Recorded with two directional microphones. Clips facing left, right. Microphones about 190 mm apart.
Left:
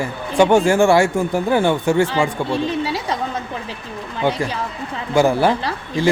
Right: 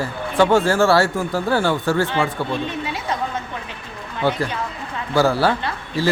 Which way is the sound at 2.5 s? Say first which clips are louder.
Left 4 dB; 35° left (ahead or behind).